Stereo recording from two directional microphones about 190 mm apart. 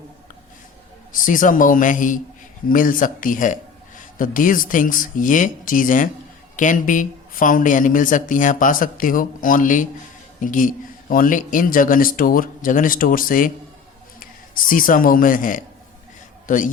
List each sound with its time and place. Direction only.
1.1 s a woman's voice: 45° left (ahead or behind)